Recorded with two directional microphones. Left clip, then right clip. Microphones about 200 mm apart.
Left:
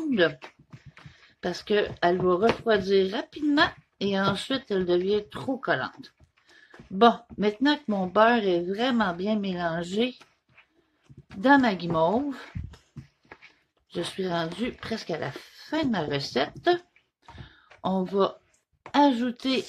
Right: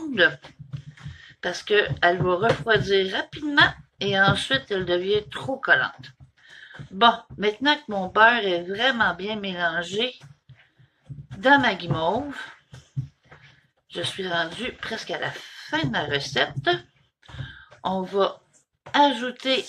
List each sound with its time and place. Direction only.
1.4 s speech: 55° left (ahead or behind)
11.4 s speech: 50° left (ahead or behind)
13.8 s speech: 50° left (ahead or behind)
18.1 s speech: 50° left (ahead or behind)